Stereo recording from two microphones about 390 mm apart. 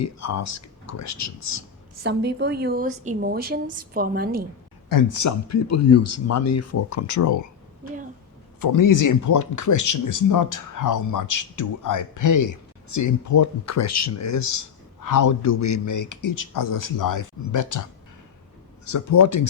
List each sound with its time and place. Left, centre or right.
0.0 s speech: left
2.0 s a woman's voice: right
4.9 s speech: left
8.6 s speech: left
18.9 s speech: left